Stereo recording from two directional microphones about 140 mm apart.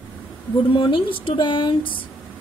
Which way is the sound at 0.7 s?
35° left (ahead or behind).